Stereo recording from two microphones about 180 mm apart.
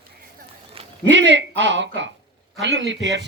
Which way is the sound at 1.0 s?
90° right.